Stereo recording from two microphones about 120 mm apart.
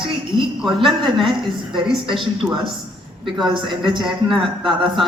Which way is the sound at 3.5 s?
40° right (ahead or behind).